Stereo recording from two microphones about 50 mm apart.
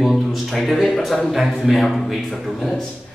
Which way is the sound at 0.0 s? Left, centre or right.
Centre.